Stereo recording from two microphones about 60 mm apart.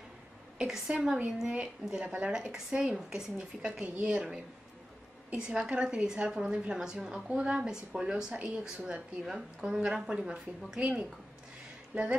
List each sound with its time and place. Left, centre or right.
0.6 s a woman's voice: centre
4.1 s a woman's voice: centre
7.5 s a woman's voice: centre